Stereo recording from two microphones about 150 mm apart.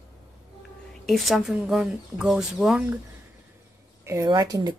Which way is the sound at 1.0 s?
Centre (ahead or behind).